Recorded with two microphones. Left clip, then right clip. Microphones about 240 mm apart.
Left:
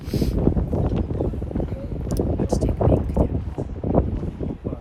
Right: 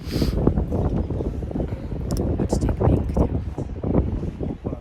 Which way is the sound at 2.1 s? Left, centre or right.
Centre.